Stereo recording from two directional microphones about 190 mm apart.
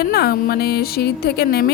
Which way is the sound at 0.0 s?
55° left (ahead or behind).